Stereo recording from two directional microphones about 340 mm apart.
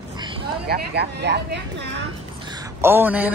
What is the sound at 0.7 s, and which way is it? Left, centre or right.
Speech, right.